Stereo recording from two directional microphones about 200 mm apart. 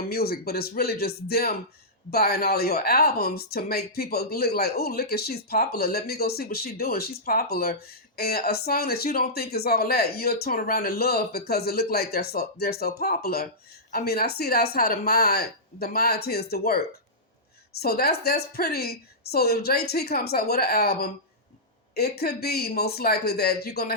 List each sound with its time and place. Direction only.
0.1 s speech: 50° left (ahead or behind)